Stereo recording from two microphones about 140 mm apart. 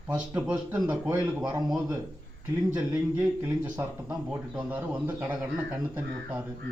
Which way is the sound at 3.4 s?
10° right (ahead or behind).